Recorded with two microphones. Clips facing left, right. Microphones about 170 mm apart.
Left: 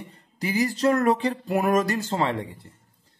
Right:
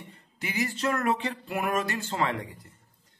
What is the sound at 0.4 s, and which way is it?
Speech, 35° left (ahead or behind).